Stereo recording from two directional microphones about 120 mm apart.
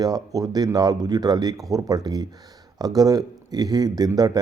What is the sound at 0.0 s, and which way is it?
Speech, 30° right (ahead or behind).